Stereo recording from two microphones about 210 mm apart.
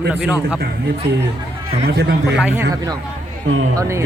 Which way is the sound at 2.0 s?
50° right (ahead or behind).